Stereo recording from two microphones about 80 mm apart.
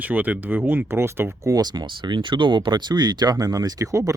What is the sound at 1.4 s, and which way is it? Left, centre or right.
Speech, right.